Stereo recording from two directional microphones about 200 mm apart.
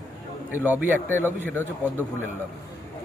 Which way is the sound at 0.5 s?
10° right (ahead or behind).